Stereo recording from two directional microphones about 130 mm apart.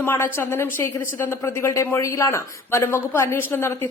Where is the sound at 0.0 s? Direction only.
20° left (ahead or behind).